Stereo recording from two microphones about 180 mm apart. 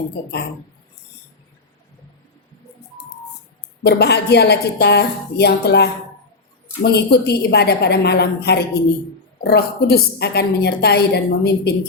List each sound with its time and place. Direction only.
3.8 s a woman's voice: 65° left (ahead or behind)